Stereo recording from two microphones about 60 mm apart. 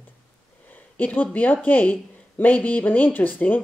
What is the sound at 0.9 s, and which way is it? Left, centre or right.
Speech, left.